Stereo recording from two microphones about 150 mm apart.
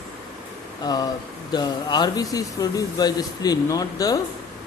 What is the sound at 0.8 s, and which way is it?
A man's voice, 25° left (ahead or behind).